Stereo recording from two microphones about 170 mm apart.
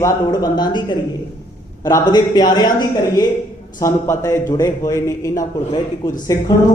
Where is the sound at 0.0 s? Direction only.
25° left (ahead or behind).